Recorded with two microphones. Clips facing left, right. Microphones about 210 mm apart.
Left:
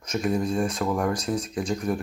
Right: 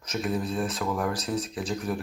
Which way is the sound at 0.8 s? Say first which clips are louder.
Left 4 dB; 25° left (ahead or behind).